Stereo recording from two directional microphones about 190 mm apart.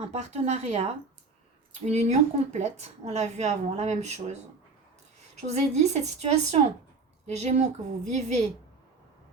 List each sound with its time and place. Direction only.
0.1 s a woman's voice: 35° right (ahead or behind)
5.5 s a woman's voice: 35° right (ahead or behind)